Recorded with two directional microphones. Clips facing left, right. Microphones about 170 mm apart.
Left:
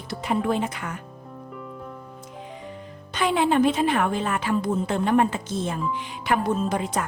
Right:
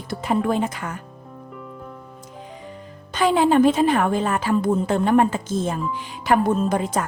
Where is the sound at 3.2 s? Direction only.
40° right (ahead or behind).